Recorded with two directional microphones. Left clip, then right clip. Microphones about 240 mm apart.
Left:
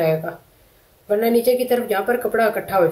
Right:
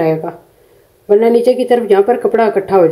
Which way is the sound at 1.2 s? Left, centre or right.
Right.